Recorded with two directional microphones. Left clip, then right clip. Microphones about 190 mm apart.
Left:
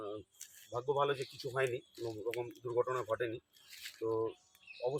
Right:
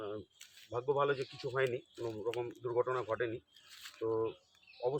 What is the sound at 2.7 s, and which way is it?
Speech, 5° right (ahead or behind).